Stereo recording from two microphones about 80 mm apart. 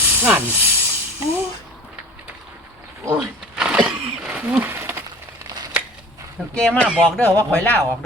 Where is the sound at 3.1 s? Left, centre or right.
Centre; by 5.0 s right.